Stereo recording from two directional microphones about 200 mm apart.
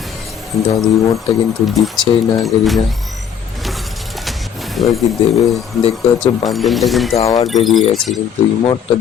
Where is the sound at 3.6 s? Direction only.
Centre (ahead or behind).